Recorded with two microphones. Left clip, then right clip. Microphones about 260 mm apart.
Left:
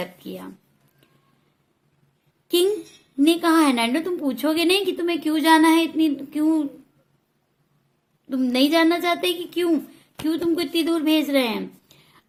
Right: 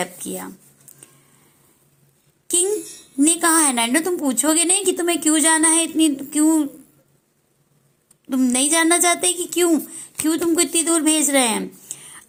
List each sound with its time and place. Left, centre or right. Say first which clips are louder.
0.0 s a woman's voice: right 5 dB; centre
2.5 s a woman's voice: left 2 dB; centre
8.3 s a woman's voice: even; centre